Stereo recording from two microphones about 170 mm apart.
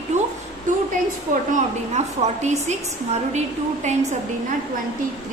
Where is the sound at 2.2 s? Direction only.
40° right (ahead or behind).